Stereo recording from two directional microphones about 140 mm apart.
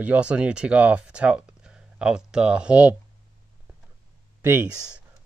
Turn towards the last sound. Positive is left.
turn(degrees=-15)  # may be behind; listen again after turning